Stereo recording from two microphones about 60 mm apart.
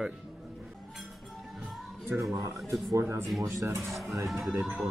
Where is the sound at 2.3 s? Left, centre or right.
Right.